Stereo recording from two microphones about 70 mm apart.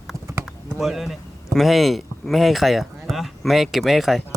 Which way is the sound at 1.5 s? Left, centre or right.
Centre.